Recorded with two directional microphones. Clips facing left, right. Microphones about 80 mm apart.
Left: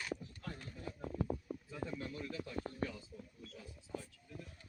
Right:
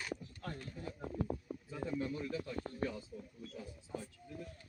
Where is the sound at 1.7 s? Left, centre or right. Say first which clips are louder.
Right 6 dB; centre.